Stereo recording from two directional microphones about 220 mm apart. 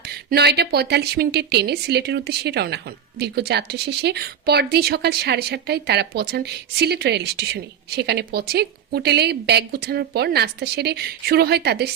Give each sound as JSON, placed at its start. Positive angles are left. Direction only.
{"t": 0.1, "sound": "a woman's voice", "side_deg": -45}